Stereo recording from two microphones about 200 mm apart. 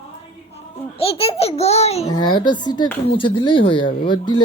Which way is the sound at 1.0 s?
30° left (ahead or behind).